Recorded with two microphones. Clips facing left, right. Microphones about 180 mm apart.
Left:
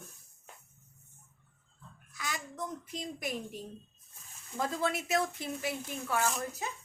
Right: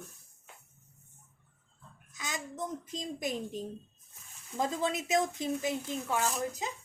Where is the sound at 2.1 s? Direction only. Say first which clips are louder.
Right 1 dB; 20° right (ahead or behind).